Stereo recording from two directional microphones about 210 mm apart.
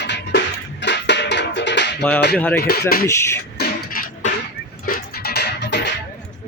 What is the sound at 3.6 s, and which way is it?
Beatboxing, 45° left (ahead or behind).